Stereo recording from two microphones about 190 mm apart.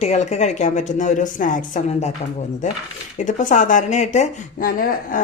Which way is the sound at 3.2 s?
40° left (ahead or behind).